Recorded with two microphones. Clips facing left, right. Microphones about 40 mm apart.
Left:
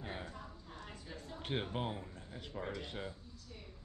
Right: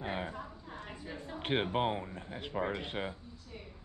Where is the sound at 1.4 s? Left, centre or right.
Right.